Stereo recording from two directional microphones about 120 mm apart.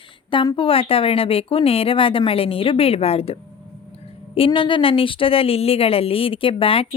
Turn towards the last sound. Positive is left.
turn(degrees=50)  # may be behind; listen again after turning